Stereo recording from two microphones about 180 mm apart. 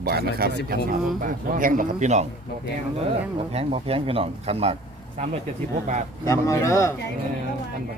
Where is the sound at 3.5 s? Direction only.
35° right (ahead or behind).